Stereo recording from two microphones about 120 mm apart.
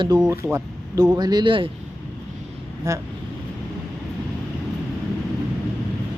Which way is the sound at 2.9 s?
25° right (ahead or behind).